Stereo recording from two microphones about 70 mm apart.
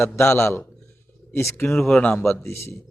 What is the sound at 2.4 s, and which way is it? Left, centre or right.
Speech, left.